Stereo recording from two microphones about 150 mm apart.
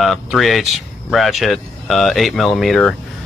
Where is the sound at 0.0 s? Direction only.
Centre (ahead or behind).